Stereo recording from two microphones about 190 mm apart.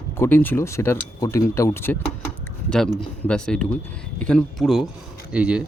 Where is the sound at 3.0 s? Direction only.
5° left (ahead or behind).